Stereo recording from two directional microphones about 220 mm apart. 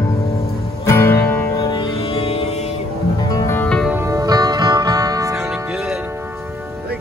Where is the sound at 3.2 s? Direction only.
15° left (ahead or behind).